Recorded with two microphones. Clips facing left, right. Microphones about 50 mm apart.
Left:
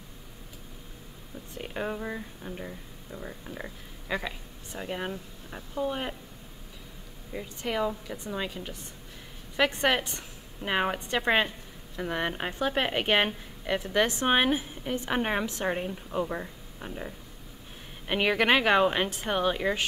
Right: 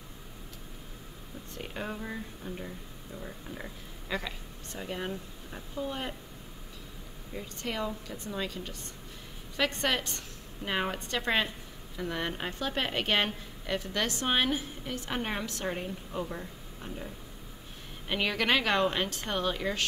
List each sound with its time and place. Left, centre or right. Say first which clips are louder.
1.6 s speech: left 4 dB; centre
7.3 s a woman's voice: left 5 dB; centre
18.0 s speech: left 5 dB; centre